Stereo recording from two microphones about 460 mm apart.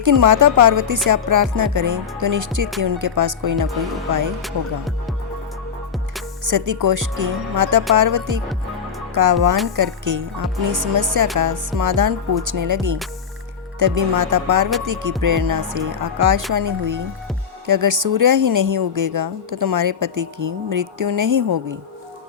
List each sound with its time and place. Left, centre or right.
0.0 s a woman's voice: right
4.4 s music: centre
6.4 s a woman's voice: right